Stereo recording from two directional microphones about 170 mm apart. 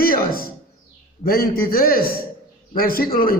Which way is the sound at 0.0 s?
60° left (ahead or behind).